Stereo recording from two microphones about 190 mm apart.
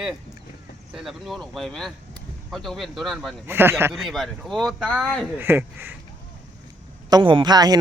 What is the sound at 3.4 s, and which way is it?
Speech, 10° right (ahead or behind).